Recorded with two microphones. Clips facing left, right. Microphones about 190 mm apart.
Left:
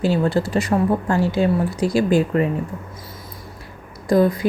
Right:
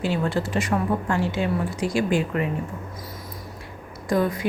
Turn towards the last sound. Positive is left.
turn(degrees=35)  # may be behind; listen again after turning